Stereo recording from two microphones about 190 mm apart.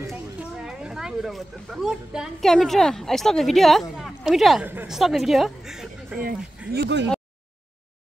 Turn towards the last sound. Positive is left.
turn(degrees=-65)  # may be behind; listen again after turning